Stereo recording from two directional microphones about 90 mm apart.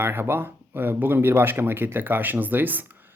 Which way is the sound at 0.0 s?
25° right (ahead or behind).